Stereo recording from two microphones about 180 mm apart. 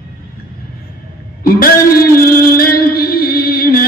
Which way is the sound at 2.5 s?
55° left (ahead or behind).